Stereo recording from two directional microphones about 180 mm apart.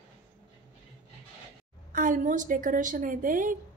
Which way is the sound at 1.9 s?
45° right (ahead or behind).